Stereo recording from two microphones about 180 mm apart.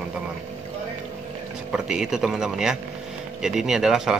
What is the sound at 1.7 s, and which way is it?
Speech, 5° right (ahead or behind).